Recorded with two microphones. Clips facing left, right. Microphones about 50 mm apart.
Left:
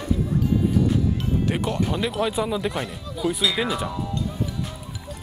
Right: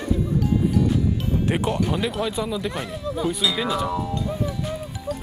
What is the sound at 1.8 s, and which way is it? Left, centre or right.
Speech, centre.